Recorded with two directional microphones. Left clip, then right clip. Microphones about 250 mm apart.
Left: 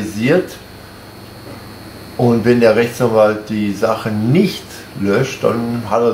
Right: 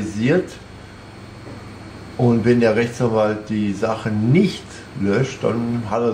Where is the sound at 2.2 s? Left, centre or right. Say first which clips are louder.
Left 4 dB; centre.